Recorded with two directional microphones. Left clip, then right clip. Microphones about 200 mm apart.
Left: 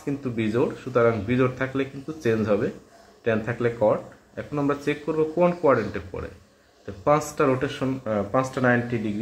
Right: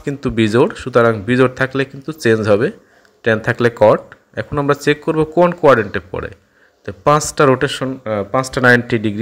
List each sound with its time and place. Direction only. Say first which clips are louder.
0.0 s speech: right 10 dB; 45° right (ahead or behind)
8.5 s speech: right 11 dB; 50° right (ahead or behind)